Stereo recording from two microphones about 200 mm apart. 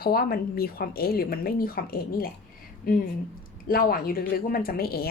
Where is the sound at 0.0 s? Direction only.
50° left (ahead or behind).